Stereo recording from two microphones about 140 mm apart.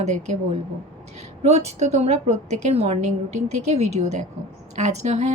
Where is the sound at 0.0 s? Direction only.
55° right (ahead or behind).